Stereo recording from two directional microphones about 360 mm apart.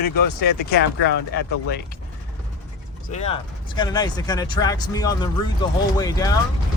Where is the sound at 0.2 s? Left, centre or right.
Left.